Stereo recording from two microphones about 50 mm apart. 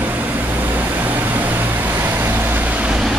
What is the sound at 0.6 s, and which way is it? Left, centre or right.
Vehicle, right.